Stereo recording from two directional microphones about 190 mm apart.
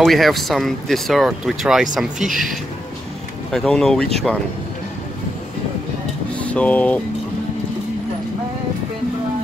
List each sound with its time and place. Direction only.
0.0 s speech: centre (ahead or behind)
3.5 s speech: 5° left (ahead or behind)
6.3 s speech: 5° left (ahead or behind)